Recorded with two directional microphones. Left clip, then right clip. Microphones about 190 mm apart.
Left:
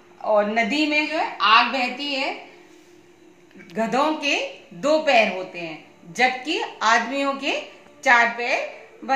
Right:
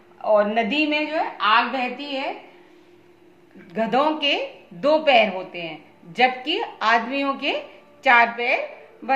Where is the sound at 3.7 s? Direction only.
20° right (ahead or behind).